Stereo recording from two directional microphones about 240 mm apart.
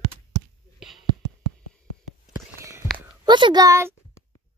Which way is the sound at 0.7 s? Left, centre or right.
Centre.